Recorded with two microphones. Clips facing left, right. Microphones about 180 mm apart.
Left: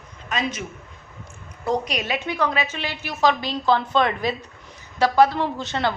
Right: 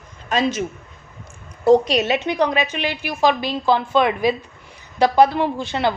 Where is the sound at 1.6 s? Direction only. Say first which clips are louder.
Right 10 dB; 25° right (ahead or behind).